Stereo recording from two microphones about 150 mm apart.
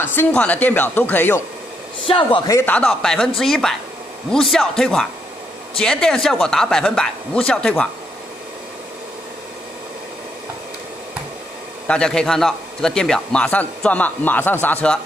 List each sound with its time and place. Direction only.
0.0 s a man's voice: 15° left (ahead or behind)
2.0 s a man's voice: 35° left (ahead or behind)
2.5 s speech: 10° left (ahead or behind)
11.9 s a man's voice: 5° left (ahead or behind)